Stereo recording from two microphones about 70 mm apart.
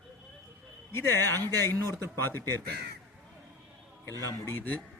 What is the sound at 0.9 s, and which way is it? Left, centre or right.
Speech, left.